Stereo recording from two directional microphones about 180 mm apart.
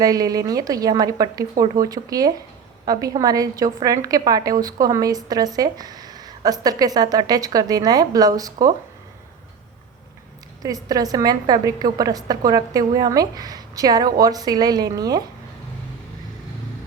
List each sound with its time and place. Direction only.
0.0 s a woman's voice: 20° right (ahead or behind)
10.8 s a woman's voice: 20° right (ahead or behind)